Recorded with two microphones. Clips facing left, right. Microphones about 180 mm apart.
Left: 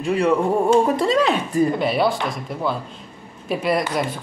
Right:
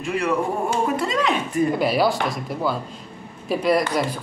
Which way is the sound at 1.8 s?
Centre (ahead or behind).